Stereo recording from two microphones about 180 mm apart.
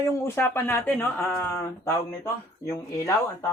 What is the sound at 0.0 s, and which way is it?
Speech, 15° left (ahead or behind).